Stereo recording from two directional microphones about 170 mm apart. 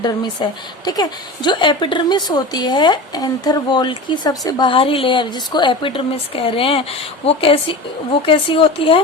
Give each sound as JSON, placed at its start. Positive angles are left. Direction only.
{"t": 0.4, "sound": "a woman's voice", "side_deg": 25}